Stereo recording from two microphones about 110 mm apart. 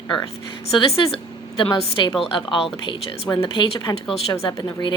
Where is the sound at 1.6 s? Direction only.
50° left (ahead or behind).